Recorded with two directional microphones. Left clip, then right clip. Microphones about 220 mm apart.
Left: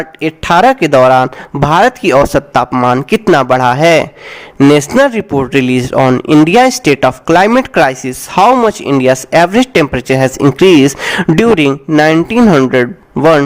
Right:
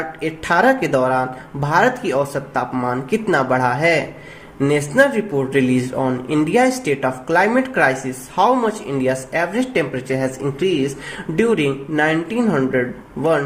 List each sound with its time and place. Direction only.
0.2 s speech: 40° left (ahead or behind)